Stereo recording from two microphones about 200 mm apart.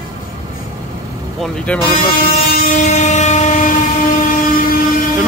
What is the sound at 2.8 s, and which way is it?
Train, 35° left (ahead or behind).